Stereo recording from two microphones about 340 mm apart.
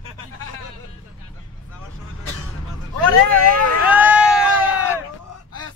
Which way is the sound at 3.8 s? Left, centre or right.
Centre.